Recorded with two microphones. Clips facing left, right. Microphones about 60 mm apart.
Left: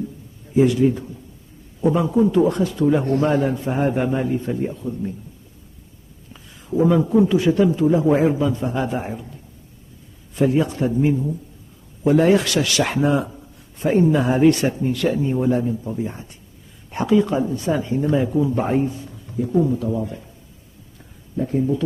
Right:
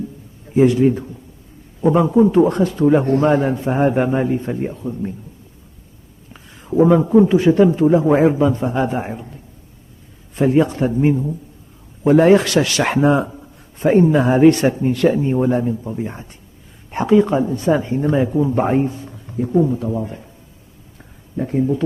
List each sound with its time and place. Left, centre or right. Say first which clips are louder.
0.6 s a man's voice: right 3 dB; right
6.3 s a man's voice: right 5 dB; right
10.3 s a man's voice: right 3 dB; right
14.0 s a man's voice: right 3 dB; right
19.5 s speech: right 3 dB; centre
19.8 s a man's voice: right 1 dB; right
21.4 s a man's voice: right 2 dB; right